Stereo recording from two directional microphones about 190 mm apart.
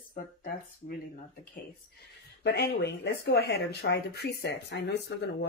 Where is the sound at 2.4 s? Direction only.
60° left (ahead or behind).